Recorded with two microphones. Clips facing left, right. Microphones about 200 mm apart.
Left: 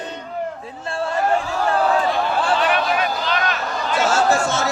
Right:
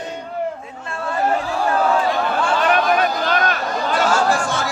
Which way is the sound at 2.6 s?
45° right (ahead or behind).